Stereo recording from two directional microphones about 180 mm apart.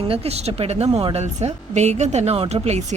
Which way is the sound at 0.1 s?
35° right (ahead or behind).